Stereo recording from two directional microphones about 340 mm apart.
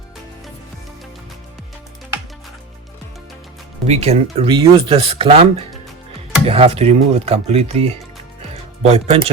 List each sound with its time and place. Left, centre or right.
3.8 s speech: centre